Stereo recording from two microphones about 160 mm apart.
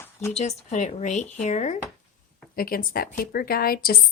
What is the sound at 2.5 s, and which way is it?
A woman's voice, 65° left (ahead or behind).